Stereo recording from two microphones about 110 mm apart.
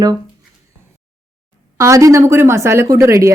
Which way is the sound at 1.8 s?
30° right (ahead or behind).